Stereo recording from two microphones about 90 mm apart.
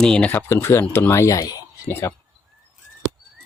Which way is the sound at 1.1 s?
35° left (ahead or behind).